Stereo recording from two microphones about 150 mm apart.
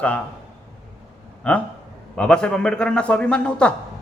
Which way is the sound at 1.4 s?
5° left (ahead or behind).